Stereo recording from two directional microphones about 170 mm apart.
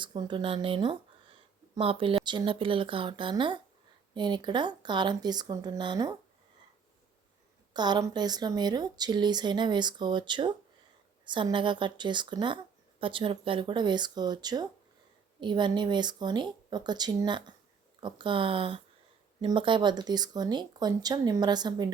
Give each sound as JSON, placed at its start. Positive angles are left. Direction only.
{"t": 0.0, "sound": "speech", "side_deg": -25}
{"t": 7.7, "sound": "speech", "side_deg": -25}